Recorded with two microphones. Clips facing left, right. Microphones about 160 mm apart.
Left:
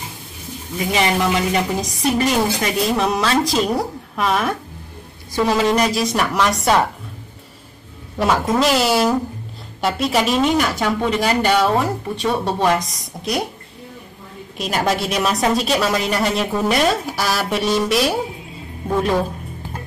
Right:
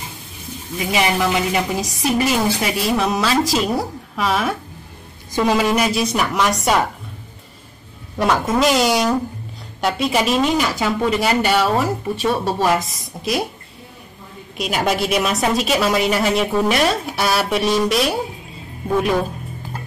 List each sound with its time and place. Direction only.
0.9 s speech: 5° right (ahead or behind)
5.3 s speech: 10° right (ahead or behind)
8.2 s speech: centre (ahead or behind)
14.6 s speech: 5° right (ahead or behind)